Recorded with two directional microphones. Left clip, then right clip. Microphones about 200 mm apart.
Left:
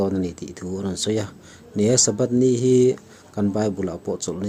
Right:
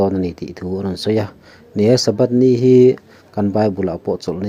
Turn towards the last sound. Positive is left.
turn(degrees=-20)  # may be behind; listen again after turning